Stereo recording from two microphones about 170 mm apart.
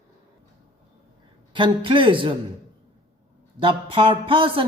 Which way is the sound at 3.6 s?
30° right (ahead or behind).